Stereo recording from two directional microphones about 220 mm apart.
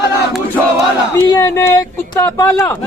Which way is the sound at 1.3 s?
15° left (ahead or behind).